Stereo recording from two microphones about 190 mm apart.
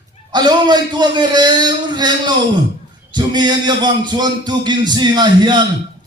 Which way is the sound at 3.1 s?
25° right (ahead or behind).